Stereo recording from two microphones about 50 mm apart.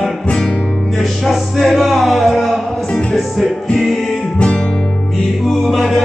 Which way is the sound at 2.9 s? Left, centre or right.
Centre.